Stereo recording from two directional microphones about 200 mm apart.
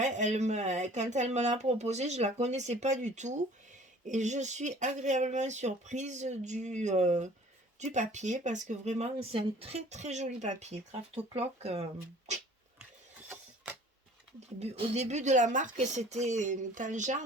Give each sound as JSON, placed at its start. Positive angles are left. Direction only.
{"t": 0.0, "sound": "speech", "side_deg": -35}
{"t": 13.2, "sound": "mechanisms", "side_deg": -10}
{"t": 14.6, "sound": "speech", "side_deg": -35}